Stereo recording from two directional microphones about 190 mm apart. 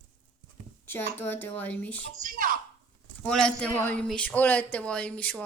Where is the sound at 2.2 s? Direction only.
45° right (ahead or behind).